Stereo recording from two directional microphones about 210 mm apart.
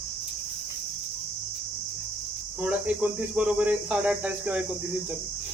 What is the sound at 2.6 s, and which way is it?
Speech, 5° right (ahead or behind).